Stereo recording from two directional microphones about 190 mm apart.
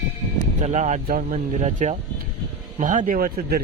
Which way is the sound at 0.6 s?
40° right (ahead or behind).